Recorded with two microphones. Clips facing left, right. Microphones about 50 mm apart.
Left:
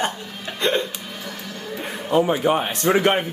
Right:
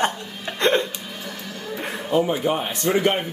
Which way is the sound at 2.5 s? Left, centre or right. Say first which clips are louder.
Left 3 dB; left.